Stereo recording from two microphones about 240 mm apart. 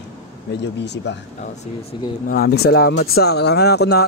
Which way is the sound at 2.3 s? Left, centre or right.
Left.